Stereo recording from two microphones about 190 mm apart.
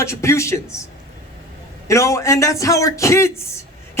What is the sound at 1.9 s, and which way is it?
Speech, 15° left (ahead or behind).